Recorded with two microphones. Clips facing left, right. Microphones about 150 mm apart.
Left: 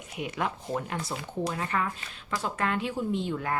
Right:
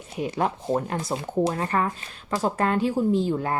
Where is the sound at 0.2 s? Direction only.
35° right (ahead or behind).